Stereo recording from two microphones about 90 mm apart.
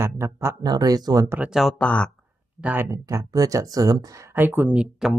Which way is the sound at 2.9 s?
35° right (ahead or behind).